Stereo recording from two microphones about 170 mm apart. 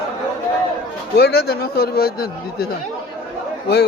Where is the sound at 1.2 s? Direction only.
70° left (ahead or behind).